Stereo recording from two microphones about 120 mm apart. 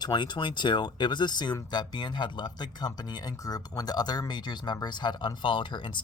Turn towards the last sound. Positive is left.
turn(degrees=40)  # may be behind; listen again after turning